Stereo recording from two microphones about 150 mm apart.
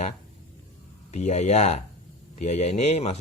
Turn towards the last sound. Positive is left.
turn(degrees=45)  # may be behind; listen again after turning